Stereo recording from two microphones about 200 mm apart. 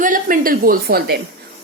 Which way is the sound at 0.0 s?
45° right (ahead or behind).